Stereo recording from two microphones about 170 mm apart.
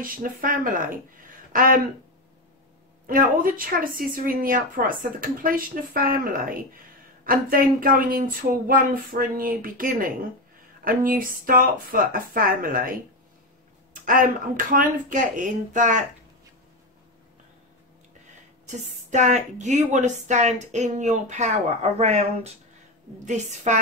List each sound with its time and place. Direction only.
0.0 s speech: 55° right (ahead or behind)
3.1 s speech: 55° right (ahead or behind)
14.7 s speech: 50° right (ahead or behind)
18.7 s speech: 45° right (ahead or behind)